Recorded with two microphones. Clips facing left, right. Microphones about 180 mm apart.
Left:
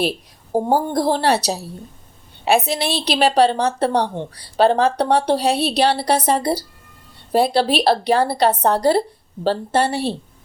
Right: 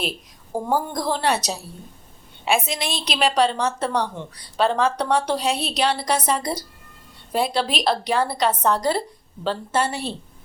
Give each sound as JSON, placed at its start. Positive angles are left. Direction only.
{"t": 0.0, "sound": "a woman's voice", "side_deg": 35}